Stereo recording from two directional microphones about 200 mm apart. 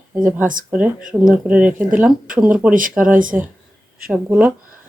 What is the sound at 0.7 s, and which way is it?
Speech, 5° right (ahead or behind).